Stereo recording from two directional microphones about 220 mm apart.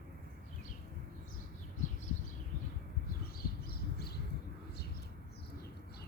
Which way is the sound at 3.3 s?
45° left (ahead or behind).